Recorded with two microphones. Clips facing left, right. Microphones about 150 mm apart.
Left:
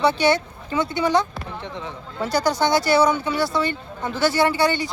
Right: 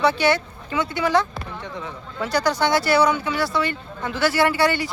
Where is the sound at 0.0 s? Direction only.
25° left (ahead or behind).